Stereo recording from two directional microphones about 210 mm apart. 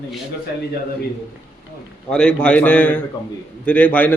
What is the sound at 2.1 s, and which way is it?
A man's voice, 5° left (ahead or behind).